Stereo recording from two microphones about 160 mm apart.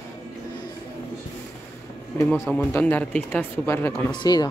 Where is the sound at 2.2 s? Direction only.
10° left (ahead or behind).